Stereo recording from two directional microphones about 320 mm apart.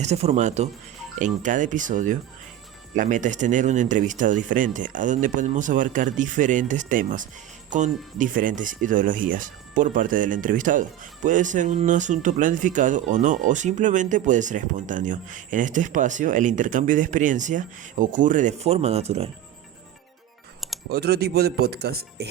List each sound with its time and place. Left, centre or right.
0.0 s speech: centre
20.9 s speech: right